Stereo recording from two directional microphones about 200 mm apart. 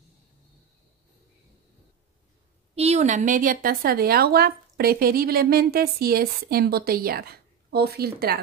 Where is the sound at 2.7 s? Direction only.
30° right (ahead or behind); by 8.4 s 50° right (ahead or behind).